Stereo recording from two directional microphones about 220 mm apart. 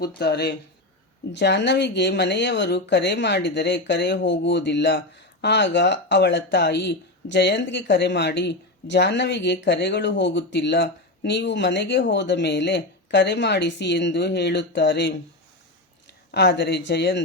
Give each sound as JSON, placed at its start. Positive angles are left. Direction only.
{"t": 0.2, "sound": "speech", "side_deg": 50}